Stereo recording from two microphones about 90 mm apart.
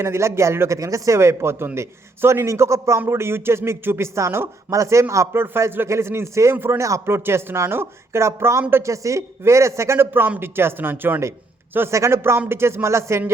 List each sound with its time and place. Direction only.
0.0 s speech: 30° right (ahead or behind)